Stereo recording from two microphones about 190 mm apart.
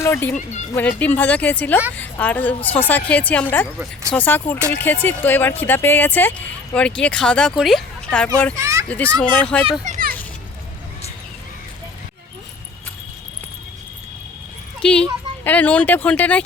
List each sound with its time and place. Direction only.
0.0 s a woman's voice: 10° left (ahead or behind)
8.5 s a child's voice: 15° right (ahead or behind)
8.9 s speech: 10° left (ahead or behind)
9.8 s children playing: 45° right (ahead or behind)
14.8 s speech: 5° left (ahead or behind)